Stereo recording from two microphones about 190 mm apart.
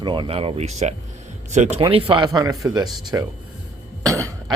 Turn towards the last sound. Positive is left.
turn(degrees=-15)  # may be behind; listen again after turning